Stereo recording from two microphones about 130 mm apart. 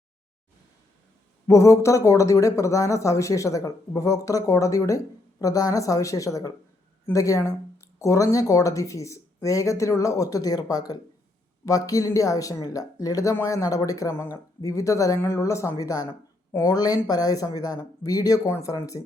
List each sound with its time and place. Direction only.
1.5 s speech: 25° left (ahead or behind)